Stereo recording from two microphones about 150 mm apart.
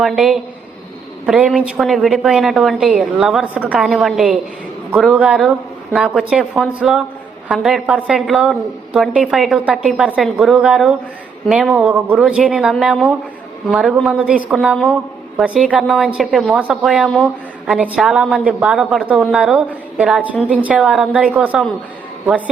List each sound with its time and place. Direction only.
0.0 s a woman's voice: 5° right (ahead or behind)